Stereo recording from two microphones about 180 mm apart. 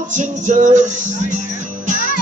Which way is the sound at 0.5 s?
40° right (ahead or behind).